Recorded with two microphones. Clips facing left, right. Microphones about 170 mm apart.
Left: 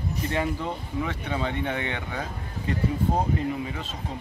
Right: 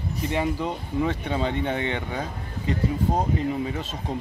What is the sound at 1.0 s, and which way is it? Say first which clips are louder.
Speech: right 5 dB; 30° right (ahead or behind).